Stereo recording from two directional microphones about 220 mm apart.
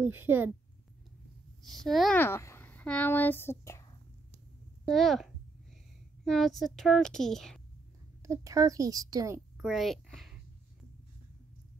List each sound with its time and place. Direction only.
0.0 s a woman's voice: 10° right (ahead or behind)
1.6 s speech: centre (ahead or behind)
4.8 s a woman's voice: centre (ahead or behind)
8.2 s a woman's voice: 15° right (ahead or behind)
9.6 s a child's voice: centre (ahead or behind)